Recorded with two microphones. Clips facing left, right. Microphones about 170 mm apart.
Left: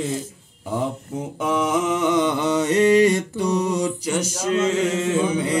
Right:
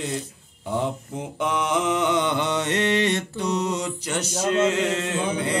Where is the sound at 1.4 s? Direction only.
5° left (ahead or behind).